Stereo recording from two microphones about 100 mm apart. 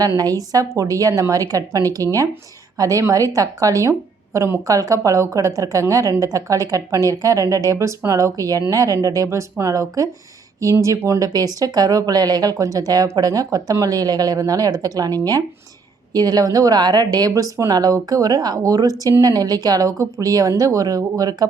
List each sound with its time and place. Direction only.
0.0 s a woman's voice: 40° right (ahead or behind)